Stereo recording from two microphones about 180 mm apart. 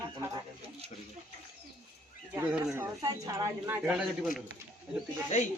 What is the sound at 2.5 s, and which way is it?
Speech, 5° right (ahead or behind).